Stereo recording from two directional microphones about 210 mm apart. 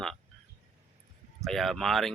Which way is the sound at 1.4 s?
Centre (ahead or behind).